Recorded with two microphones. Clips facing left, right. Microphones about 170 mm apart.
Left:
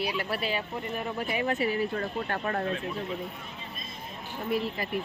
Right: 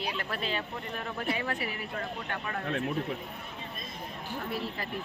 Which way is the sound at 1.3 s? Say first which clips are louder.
Left 7 dB; 20° left (ahead or behind).